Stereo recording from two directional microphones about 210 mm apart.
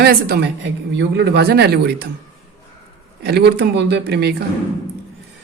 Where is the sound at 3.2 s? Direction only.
50° right (ahead or behind).